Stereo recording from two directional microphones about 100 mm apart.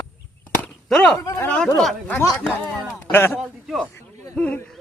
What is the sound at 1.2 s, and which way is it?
Speech, 30° left (ahead or behind).